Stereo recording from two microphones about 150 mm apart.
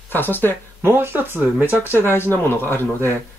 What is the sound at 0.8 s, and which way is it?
Speech, 15° right (ahead or behind).